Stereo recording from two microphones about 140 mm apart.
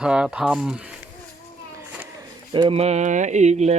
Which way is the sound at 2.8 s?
50° right (ahead or behind).